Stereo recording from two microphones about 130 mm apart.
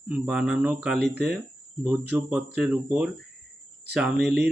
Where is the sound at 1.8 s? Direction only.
15° right (ahead or behind).